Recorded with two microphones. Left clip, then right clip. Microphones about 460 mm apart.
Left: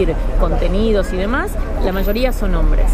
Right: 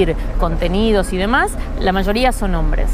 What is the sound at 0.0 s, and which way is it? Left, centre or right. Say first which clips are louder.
Speech: right 1 dB; right.